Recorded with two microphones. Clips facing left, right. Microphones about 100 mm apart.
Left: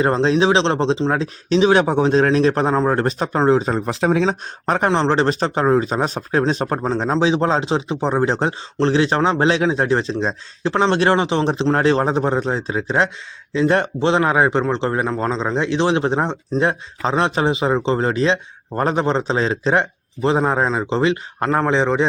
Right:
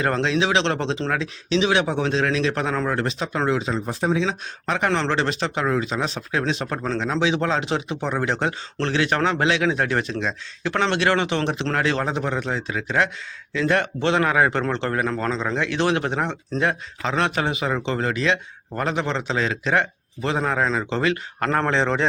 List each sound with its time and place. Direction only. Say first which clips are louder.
0.0 s a man's voice: left 6 dB; 30° left (ahead or behind)
1.2 s speech: left 6 dB; 35° left (ahead or behind)
3.8 s speech: left 5 dB; 70° left (ahead or behind)
4.2 s speech: left 5 dB; 45° left (ahead or behind)
4.9 s a man's voice: left 6 dB; 30° left (ahead or behind); by 22.0 s 15° left (ahead or behind)